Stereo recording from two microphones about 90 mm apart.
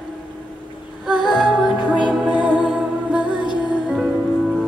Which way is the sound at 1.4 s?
10° right (ahead or behind).